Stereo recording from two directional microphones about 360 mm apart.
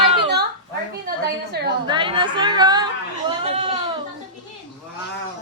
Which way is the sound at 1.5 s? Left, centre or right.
Right.